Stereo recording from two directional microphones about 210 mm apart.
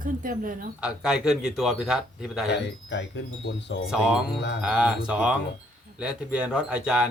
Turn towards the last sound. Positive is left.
turn(degrees=-5)  # may be behind; listen again after turning